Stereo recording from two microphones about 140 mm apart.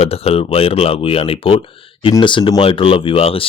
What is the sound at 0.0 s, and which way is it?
Speech, 45° left (ahead or behind).